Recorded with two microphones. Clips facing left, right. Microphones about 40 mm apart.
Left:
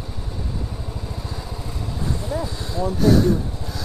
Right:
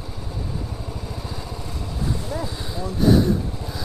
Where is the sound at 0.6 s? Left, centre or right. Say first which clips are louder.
Even; centre.